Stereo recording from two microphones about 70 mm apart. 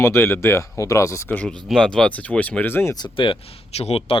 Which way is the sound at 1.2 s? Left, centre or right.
Left.